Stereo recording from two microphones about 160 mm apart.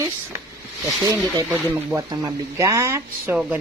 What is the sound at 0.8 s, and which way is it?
Speech, 15° right (ahead or behind).